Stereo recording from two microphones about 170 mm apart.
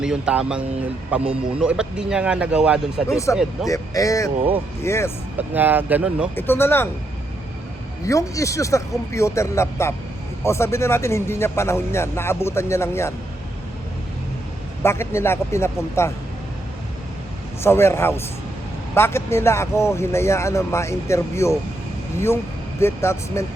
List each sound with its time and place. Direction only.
0.0 s speech: 5° right (ahead or behind)
3.7 s speech: 20° left (ahead or behind)
5.4 s speech: 10° right (ahead or behind)
6.3 s speech: 15° left (ahead or behind)
8.0 s speech: 20° left (ahead or behind)
14.8 s speech: 15° left (ahead or behind)
17.6 s speech: 15° left (ahead or behind)
22.8 s speech: 15° left (ahead or behind)